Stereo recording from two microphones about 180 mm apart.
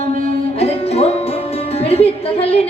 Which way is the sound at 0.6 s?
35° left (ahead or behind).